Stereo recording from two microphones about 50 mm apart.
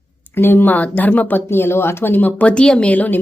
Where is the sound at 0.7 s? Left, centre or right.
Left.